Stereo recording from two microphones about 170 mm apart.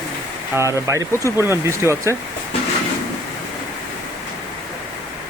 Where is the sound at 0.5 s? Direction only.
15° right (ahead or behind).